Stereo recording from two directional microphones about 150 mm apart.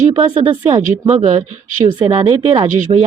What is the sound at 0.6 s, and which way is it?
Speech, 50° right (ahead or behind).